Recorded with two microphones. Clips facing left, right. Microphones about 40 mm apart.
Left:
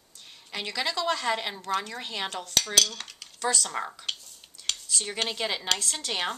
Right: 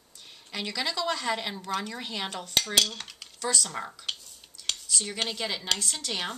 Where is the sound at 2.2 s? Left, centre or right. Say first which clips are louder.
Left 2 dB; centre.